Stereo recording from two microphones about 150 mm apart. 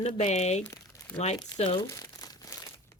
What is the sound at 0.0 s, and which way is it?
Speech, 50° left (ahead or behind).